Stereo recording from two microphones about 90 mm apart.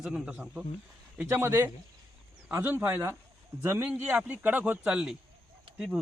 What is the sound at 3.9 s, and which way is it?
Speech, 15° right (ahead or behind).